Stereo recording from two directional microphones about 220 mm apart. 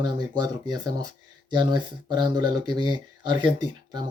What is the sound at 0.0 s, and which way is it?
Speech, 20° right (ahead or behind).